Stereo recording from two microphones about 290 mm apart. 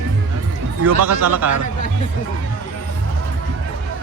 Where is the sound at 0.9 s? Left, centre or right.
Right.